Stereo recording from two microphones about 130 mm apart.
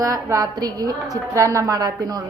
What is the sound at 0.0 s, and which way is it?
A woman's voice, 25° right (ahead or behind).